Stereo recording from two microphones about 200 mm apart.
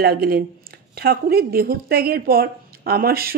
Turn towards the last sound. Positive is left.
turn(degrees=-50)  # may be behind; listen again after turning